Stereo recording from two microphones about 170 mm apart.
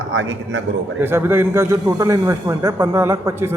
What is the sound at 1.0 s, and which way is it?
A man's voice, 15° right (ahead or behind).